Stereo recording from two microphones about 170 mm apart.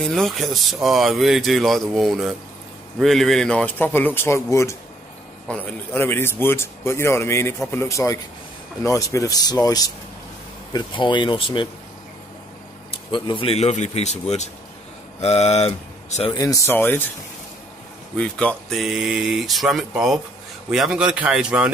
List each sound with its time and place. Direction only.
0.0 s a man's voice: centre (ahead or behind); by 11.7 s 30° left (ahead or behind)
12.9 s speech: 30° left (ahead or behind)
15.2 s speech: 40° left (ahead or behind)
16.3 s a man's voice: 20° left (ahead or behind)
18.1 s speech: 5° left (ahead or behind)